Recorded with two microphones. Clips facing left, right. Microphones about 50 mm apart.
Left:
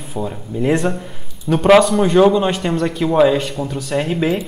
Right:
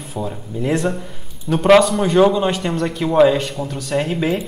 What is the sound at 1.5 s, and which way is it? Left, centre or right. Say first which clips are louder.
Speech: left 1 dB; centre.